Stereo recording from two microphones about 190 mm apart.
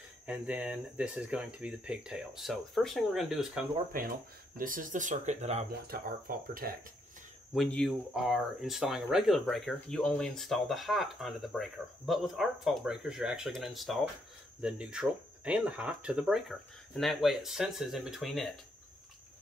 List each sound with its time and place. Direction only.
0.3 s speech: 5° right (ahead or behind)
3.9 s speech: 50° right (ahead or behind)
5.7 s speech: 50° right (ahead or behind)
7.5 s speech: centre (ahead or behind)